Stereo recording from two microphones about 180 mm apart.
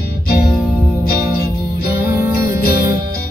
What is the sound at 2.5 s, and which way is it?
Music, 55° left (ahead or behind).